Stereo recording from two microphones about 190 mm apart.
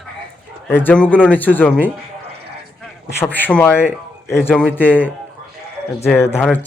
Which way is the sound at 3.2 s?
10° left (ahead or behind).